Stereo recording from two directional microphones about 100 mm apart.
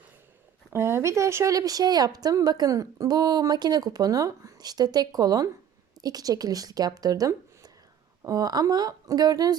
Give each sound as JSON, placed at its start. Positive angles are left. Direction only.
{"t": 0.7, "sound": "speech", "side_deg": -25}